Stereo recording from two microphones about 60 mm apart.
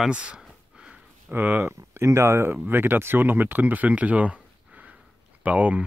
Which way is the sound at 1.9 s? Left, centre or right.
Right.